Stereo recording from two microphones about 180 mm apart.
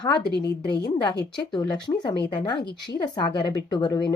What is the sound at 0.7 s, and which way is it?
A woman's voice, 20° left (ahead or behind).